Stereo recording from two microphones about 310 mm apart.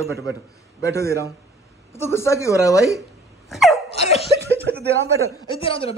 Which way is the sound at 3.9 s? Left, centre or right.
Centre.